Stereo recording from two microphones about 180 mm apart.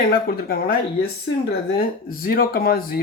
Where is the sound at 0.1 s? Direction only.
55° left (ahead or behind).